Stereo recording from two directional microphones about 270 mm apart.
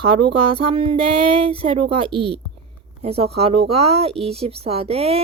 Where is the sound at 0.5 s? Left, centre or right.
Centre.